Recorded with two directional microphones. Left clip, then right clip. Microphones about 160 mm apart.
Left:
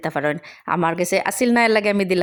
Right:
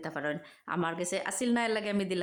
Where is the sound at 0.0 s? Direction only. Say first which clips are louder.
Left 13 dB; 45° left (ahead or behind).